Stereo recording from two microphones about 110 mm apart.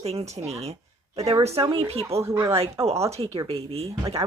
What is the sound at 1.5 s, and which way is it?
Speech, 60° right (ahead or behind).